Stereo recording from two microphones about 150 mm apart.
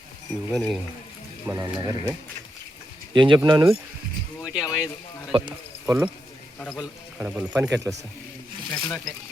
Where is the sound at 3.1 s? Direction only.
30° right (ahead or behind).